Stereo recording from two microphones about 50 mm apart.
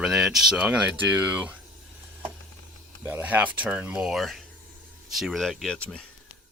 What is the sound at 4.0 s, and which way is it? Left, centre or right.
Speech, centre.